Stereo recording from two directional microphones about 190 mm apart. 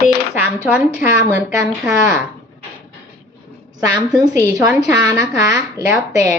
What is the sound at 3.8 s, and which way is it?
Speech, 20° right (ahead or behind).